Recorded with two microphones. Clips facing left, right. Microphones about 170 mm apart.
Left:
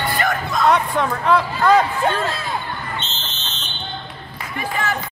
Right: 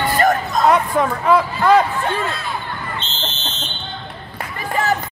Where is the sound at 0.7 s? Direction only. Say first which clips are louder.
Right 2 dB; 5° right (ahead or behind).